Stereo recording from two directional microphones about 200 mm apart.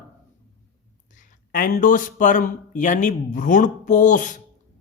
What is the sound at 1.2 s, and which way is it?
Speech, 40° left (ahead or behind).